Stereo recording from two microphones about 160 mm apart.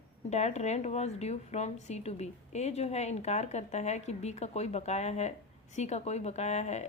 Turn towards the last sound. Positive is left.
turn(degrees=45)  # may be behind; listen again after turning